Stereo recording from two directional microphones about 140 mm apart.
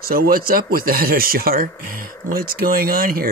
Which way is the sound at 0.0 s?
90° right.